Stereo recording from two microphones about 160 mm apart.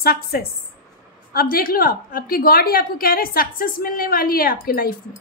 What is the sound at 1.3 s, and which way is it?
A woman's voice, 65° left (ahead or behind).